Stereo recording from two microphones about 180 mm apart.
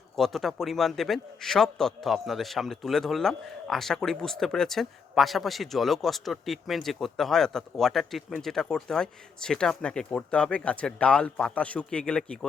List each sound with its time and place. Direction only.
0.2 s a man's voice: centre (ahead or behind)